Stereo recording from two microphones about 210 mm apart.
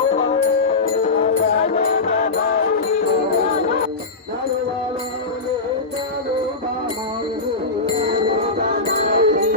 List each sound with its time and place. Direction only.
1.2 s music: 30° left (ahead or behind)
7.9 s music: 30° right (ahead or behind)
8.5 s music: 45° right (ahead or behind)